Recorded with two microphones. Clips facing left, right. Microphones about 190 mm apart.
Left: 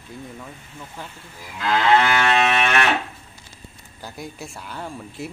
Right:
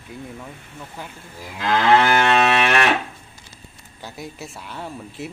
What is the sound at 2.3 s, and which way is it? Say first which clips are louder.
Livestock: right 2 dB; 65° right (ahead or behind).